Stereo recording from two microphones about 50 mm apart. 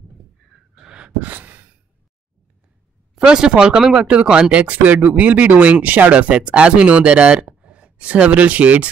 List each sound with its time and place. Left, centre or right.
0.7 s a sound: centre
1.2 s sigh: right
3.2 s speech: centre